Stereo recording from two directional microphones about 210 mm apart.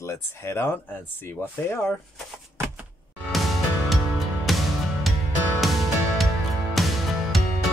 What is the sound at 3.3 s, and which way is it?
Music, centre (ahead or behind).